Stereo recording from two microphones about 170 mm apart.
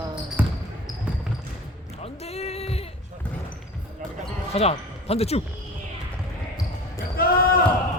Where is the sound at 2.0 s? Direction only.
40° left (ahead or behind).